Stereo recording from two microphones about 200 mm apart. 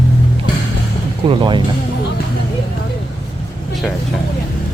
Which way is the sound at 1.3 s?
25° right (ahead or behind).